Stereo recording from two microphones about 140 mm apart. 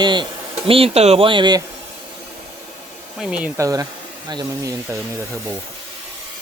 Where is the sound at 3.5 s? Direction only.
25° right (ahead or behind).